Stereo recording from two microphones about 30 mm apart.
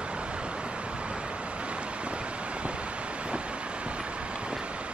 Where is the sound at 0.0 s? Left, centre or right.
Right.